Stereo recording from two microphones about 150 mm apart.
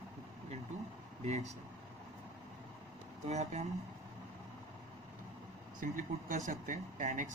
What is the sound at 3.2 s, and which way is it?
Speech, 50° right (ahead or behind).